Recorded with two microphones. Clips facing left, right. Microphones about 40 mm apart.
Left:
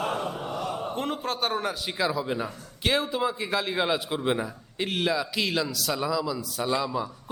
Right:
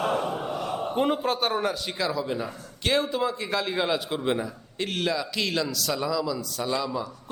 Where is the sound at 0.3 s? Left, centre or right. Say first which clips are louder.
Right 2 dB; centre.